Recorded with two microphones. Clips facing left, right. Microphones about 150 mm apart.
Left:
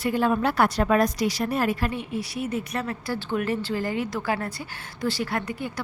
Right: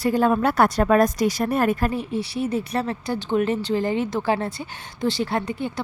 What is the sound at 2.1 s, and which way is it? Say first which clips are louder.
Speech: right 4 dB; 30° right (ahead or behind).